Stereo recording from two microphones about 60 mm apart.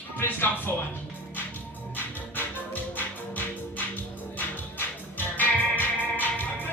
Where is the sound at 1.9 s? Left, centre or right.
Left.